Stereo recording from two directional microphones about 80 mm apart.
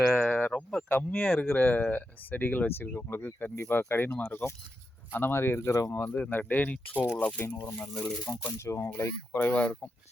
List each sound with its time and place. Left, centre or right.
0.1 s a sound: centre
0.3 s a sound: left
0.9 s speech: centre; by 6.1 s left
6.1 s speech: centre
8.2 s speech: left
8.5 s speech: left
9.4 s speech: centre